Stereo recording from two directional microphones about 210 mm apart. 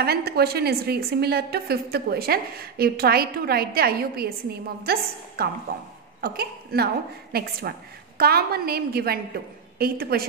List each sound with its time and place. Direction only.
0.0 s a woman's voice: 50° right (ahead or behind)